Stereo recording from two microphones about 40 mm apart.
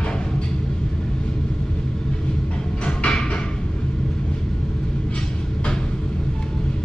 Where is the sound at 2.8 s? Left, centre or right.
Left.